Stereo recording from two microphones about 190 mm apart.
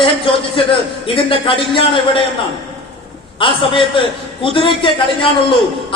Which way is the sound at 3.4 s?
25° left (ahead or behind).